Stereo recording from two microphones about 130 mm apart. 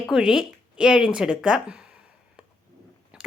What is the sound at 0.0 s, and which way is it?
Speech, 5° right (ahead or behind).